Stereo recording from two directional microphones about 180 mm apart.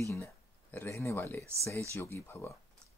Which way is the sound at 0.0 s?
15° left (ahead or behind).